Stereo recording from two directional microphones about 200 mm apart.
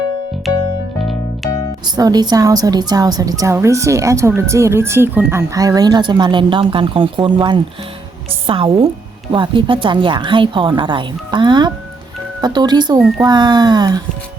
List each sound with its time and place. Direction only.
0.4 s music: centre (ahead or behind)
2.0 s a woman's voice: 20° right (ahead or behind)